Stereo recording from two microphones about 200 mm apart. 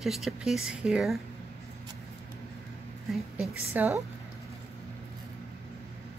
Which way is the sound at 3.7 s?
10° right (ahead or behind).